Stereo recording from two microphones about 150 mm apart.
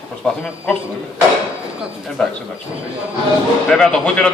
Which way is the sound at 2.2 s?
5° left (ahead or behind).